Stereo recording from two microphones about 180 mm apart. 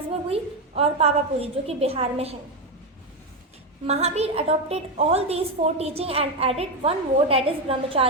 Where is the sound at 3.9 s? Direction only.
35° right (ahead or behind).